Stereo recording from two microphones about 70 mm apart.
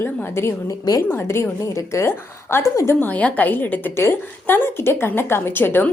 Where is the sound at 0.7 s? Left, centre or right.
Left.